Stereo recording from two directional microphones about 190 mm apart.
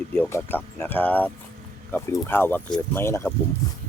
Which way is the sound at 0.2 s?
15° left (ahead or behind).